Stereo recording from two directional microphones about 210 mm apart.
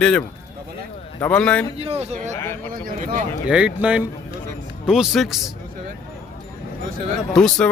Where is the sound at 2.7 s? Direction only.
40° right (ahead or behind).